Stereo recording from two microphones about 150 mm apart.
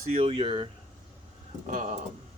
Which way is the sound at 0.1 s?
40° right (ahead or behind).